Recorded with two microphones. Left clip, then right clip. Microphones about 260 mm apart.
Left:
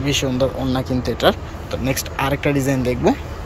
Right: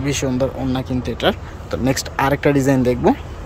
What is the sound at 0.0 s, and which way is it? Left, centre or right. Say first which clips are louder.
Speech: left 1 dB; centre.